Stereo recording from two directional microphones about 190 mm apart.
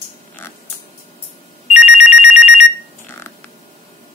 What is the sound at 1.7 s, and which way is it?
Telephone bell ringing, 35° left (ahead or behind).